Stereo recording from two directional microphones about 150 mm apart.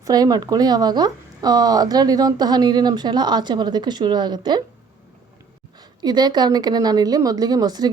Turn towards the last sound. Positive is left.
turn(degrees=-25)  # may be behind; listen again after turning